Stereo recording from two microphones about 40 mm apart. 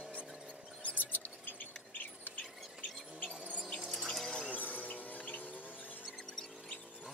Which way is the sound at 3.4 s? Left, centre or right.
Right.